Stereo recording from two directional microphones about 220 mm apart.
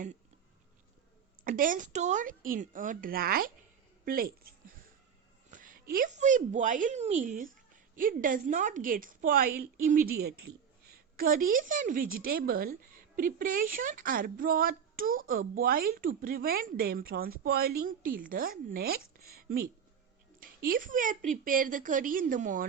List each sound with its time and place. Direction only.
1.5 s a woman's voice: 40° right (ahead or behind)